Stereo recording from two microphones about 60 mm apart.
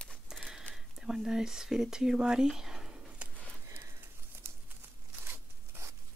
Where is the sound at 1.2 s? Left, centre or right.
Centre.